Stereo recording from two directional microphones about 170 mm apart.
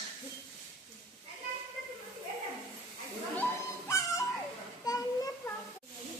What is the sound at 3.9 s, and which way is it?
Music, 20° left (ahead or behind).